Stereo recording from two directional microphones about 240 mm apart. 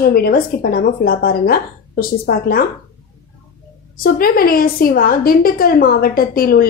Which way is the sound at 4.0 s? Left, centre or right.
Left.